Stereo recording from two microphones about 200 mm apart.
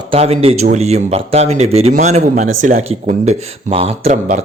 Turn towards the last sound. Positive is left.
turn(degrees=-30)  # may be behind; listen again after turning